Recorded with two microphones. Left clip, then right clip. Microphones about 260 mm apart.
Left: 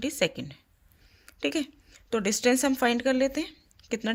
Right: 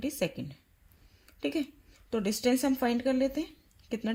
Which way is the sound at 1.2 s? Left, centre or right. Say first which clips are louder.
Left 4 dB; left.